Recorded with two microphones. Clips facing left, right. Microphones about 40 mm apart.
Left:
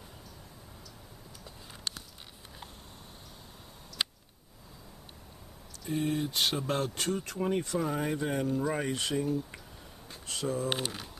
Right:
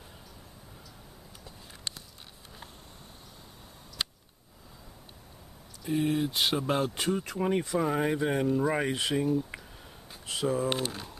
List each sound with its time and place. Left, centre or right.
5.9 s speech: centre